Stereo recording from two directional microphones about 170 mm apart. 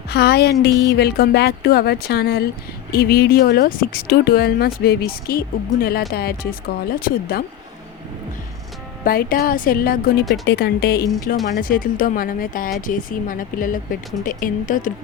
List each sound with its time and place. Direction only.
0.1 s speech: 70° left (ahead or behind)
9.0 s speech: 60° left (ahead or behind)
10.4 s speech: 80° left
11.5 s speech: 55° left (ahead or behind)